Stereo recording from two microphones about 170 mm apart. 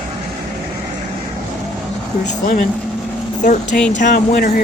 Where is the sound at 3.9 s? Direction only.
50° left (ahead or behind).